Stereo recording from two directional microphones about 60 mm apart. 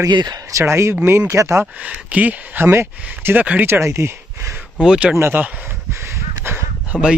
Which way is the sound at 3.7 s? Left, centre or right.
Right.